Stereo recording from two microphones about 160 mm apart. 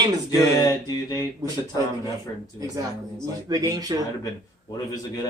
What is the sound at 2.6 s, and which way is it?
Speech, 20° right (ahead or behind).